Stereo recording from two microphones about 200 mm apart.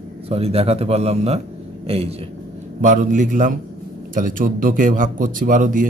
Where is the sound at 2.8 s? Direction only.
40° right (ahead or behind).